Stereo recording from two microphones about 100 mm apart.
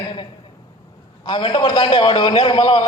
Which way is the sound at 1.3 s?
50° left (ahead or behind).